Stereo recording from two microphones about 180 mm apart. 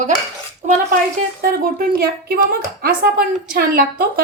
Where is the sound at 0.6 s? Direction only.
40° right (ahead or behind).